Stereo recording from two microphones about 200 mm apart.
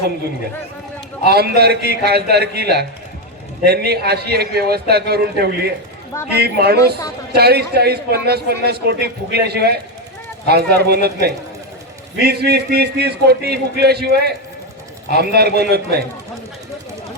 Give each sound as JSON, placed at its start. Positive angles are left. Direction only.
{"t": 1.2, "sound": "a man's voice", "side_deg": -55}